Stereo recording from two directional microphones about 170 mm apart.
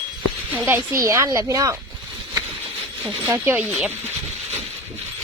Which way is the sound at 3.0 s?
15° right (ahead or behind).